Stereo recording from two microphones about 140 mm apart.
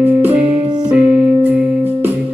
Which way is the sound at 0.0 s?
15° right (ahead or behind).